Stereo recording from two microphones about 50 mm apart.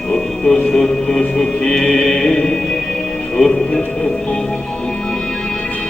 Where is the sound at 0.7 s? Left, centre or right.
Centre.